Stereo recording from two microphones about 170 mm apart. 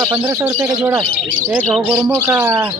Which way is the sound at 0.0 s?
20° right (ahead or behind).